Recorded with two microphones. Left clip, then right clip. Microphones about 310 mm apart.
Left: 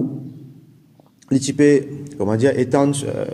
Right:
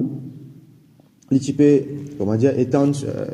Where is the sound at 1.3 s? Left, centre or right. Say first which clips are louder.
Left 1 dB; centre.